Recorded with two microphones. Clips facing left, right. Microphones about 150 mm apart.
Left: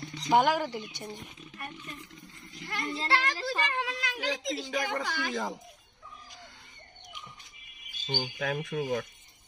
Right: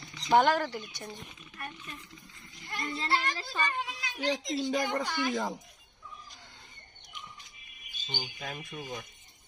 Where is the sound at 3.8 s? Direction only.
90° left.